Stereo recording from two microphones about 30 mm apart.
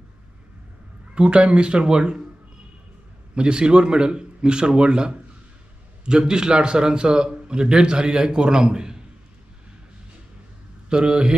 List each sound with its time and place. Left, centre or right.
1.1 s speech: right
3.3 s a man's voice: right
10.9 s a man's voice: right